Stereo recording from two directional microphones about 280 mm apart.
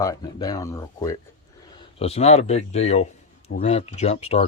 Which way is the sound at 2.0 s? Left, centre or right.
Left.